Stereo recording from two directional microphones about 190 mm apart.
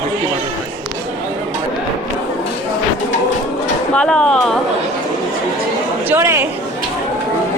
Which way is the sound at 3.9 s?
5° left (ahead or behind).